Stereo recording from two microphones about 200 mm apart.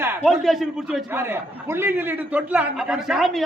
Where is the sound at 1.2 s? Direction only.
10° right (ahead or behind).